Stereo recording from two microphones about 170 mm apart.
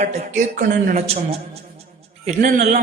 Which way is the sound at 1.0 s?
35° right (ahead or behind).